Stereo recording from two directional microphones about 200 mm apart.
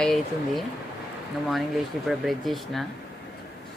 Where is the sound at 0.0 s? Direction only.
Centre (ahead or behind).